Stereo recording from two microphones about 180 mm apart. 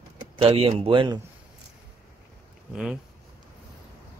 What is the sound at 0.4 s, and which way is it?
Speech, 30° right (ahead or behind).